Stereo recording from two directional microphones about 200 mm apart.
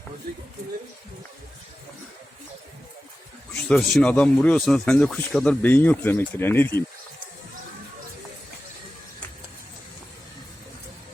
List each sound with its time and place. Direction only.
3.7 s speech: 5° left (ahead or behind)